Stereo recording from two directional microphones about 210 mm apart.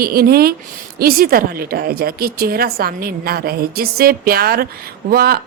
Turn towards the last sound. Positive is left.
turn(degrees=-45)  # may be behind; listen again after turning